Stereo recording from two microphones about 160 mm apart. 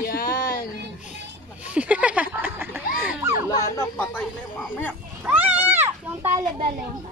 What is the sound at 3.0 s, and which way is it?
Children playing, 15° right (ahead or behind).